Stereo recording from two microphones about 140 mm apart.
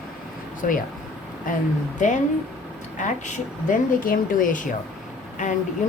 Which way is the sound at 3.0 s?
60° left (ahead or behind).